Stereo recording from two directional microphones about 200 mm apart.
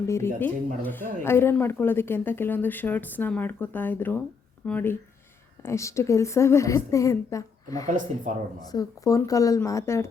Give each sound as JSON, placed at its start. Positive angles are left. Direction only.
{"t": 0.1, "sound": "a woman's voice", "side_deg": 10}
{"t": 7.9, "sound": "speech", "side_deg": -40}
{"t": 8.7, "sound": "a woman's voice", "side_deg": 15}